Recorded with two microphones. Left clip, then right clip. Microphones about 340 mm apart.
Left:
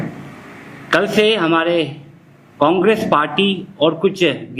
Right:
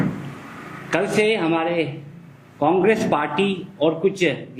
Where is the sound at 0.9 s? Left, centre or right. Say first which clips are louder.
Left 5 dB; left.